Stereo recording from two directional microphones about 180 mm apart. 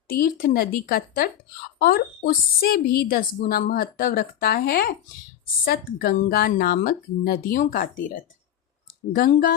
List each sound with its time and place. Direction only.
0.1 s a woman's voice: 55° left (ahead or behind)